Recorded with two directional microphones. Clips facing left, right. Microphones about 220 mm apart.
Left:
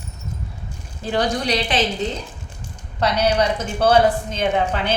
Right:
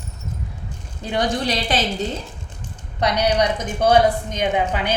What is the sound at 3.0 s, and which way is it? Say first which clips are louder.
A woman's voice: even; 15° right (ahead or behind).